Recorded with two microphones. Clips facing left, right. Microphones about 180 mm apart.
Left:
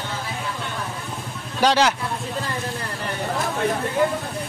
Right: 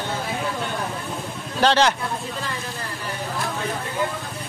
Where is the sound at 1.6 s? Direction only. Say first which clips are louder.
Even; 10° left (ahead or behind).